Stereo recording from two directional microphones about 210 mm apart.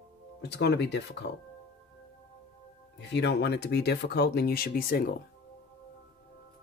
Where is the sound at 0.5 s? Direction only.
55° left (ahead or behind).